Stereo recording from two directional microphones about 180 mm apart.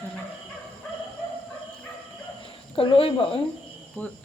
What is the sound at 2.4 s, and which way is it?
Speech, 30° left (ahead or behind).